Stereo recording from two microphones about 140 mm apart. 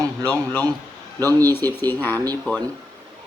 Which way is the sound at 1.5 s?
15° left (ahead or behind).